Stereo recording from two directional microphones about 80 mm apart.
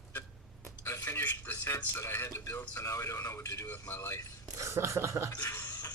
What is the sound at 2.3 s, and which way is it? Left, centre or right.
A man's voice, left.